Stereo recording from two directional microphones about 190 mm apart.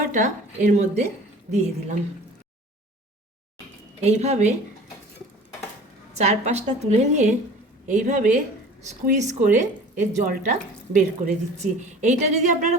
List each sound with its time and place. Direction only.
0.1 s a woman's voice: 40° right (ahead or behind)
4.0 s a woman's voice: 35° right (ahead or behind)
6.1 s a woman's voice: 35° right (ahead or behind)